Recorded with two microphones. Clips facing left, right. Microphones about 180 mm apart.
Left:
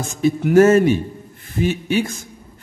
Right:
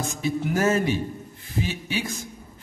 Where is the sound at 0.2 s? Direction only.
50° left (ahead or behind).